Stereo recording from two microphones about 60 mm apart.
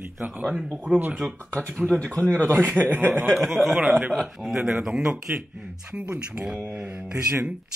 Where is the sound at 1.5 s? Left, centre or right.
Centre.